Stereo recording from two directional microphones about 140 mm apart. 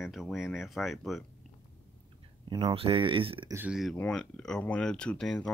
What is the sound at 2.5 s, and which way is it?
Speech, 35° right (ahead or behind).